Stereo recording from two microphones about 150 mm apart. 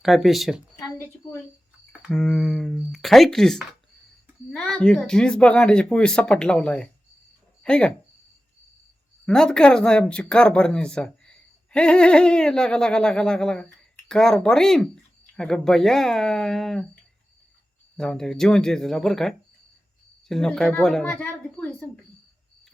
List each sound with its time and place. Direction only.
0.0 s speech: centre (ahead or behind)
0.8 s a sound: 15° left (ahead or behind)
1.9 s speech: centre (ahead or behind)
9.2 s speech: 5° left (ahead or behind)
17.9 s speech: 5° left (ahead or behind)